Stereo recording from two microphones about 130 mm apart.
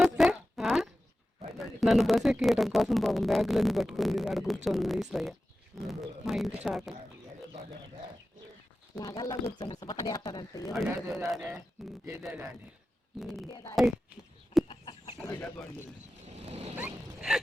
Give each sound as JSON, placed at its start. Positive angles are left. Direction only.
{"t": 0.0, "sound": "fart", "side_deg": -5}
{"t": 1.5, "sound": "speech", "side_deg": 0}
{"t": 9.0, "sound": "speech", "side_deg": 25}
{"t": 10.8, "sound": "a man's voice", "side_deg": -20}
{"t": 13.1, "sound": "speech", "side_deg": 0}
{"t": 14.7, "sound": "chicken", "side_deg": 35}
{"t": 15.3, "sound": "speech", "side_deg": 15}
{"t": 16.4, "sound": "boat", "side_deg": -55}
{"t": 16.7, "sound": "dog", "side_deg": -10}